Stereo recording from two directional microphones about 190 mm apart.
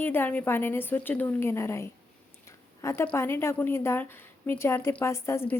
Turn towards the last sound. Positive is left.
turn(degrees=15)  # may be behind; listen again after turning